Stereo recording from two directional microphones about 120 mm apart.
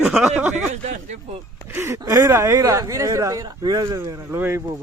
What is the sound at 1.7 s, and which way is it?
Speech, 20° right (ahead or behind).